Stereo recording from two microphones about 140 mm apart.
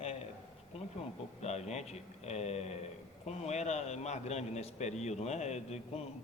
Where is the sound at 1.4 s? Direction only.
50° left (ahead or behind).